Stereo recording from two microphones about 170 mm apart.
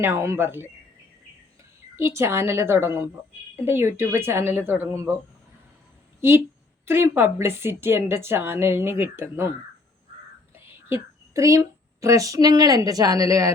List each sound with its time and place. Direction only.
0.0 s a woman's voice: 15° right (ahead or behind)
2.0 s a woman's voice: 15° right (ahead or behind)
6.8 s a woman's voice: 15° right (ahead or behind)
10.5 s speech: 15° right (ahead or behind)